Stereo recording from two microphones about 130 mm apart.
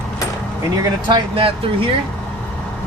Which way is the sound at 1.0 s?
40° right (ahead or behind).